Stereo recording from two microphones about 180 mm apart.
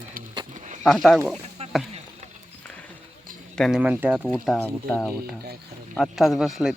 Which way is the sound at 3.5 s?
Centre (ahead or behind).